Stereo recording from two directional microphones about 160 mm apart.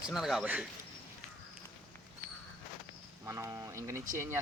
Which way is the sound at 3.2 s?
20° right (ahead or behind).